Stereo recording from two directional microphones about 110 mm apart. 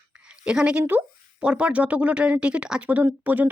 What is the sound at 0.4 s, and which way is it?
Speech, 10° right (ahead or behind).